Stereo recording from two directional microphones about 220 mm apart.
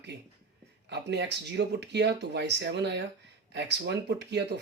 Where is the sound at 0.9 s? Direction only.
50° right (ahead or behind).